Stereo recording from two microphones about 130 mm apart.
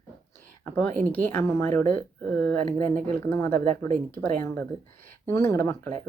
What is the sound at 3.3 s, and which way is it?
Speech, 20° left (ahead or behind).